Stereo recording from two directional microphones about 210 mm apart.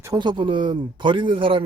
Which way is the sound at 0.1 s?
20° right (ahead or behind).